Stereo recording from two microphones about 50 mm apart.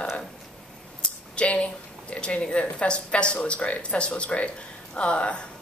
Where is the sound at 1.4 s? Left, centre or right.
Left.